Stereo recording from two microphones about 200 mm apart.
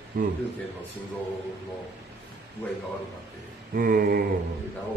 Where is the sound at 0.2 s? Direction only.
50° right (ahead or behind).